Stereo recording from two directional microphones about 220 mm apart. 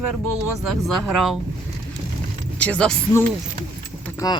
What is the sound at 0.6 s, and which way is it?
Speech, centre (ahead or behind).